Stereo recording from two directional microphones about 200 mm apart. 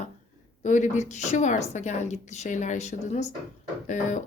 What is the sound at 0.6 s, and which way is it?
A woman's voice, 35° left (ahead or behind).